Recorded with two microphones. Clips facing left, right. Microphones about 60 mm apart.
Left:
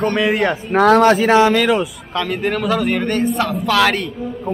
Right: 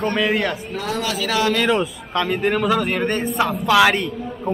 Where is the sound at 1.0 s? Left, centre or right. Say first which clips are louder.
Left 10 dB; left.